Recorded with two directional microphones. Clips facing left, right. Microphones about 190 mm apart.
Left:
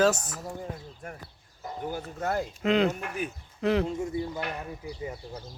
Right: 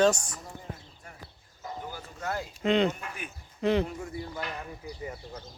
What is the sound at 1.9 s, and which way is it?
Speech, 50° left (ahead or behind).